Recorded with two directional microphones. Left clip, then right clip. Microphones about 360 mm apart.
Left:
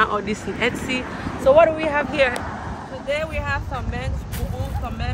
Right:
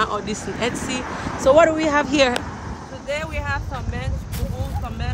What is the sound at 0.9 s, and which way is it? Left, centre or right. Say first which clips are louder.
Speech: right 1 dB; centre.